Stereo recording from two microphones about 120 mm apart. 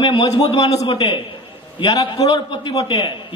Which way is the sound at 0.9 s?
40° left (ahead or behind).